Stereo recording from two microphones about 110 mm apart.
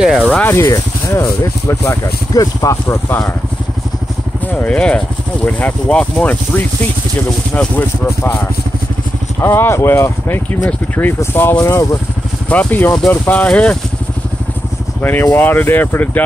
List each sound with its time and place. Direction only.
0.0 s speech: 5° right (ahead or behind)
0.5 s speech: 25° left (ahead or behind)
4.6 s speech: 10° left (ahead or behind)
11.5 s speech: 30° left (ahead or behind)
12.4 s speech: 15° left (ahead or behind)
15.0 s speech: 15° left (ahead or behind)